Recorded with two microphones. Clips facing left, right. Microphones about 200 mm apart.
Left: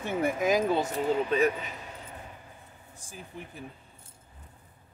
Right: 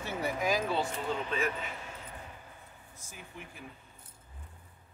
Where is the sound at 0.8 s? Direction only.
40° left (ahead or behind).